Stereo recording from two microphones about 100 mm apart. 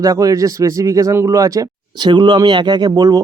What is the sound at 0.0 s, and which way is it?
Speech, 35° right (ahead or behind).